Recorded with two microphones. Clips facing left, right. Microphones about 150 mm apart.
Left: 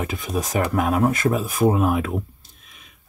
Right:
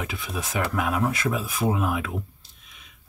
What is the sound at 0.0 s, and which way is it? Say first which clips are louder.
Speech: left 6 dB; 45° left (ahead or behind).